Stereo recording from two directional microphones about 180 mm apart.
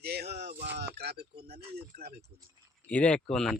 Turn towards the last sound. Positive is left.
turn(degrees=5)  # may be behind; listen again after turning